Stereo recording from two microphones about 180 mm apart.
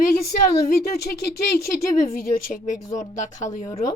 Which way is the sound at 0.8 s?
60° left (ahead or behind).